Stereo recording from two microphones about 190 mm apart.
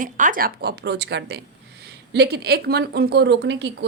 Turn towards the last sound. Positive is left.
turn(degrees=-65)  # may be behind; listen again after turning